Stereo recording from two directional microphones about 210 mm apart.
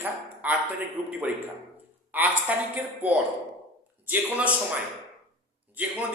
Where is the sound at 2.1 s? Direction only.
10° right (ahead or behind).